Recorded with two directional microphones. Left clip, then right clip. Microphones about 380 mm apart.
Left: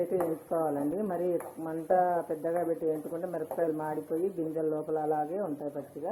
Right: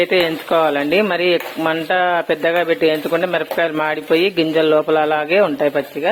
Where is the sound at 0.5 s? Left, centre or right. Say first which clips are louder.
Right 17 dB; right.